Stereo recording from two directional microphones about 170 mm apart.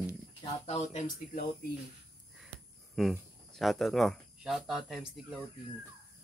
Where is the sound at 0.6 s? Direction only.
40° left (ahead or behind).